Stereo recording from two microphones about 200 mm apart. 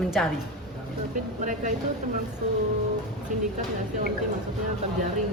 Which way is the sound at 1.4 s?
40° right (ahead or behind).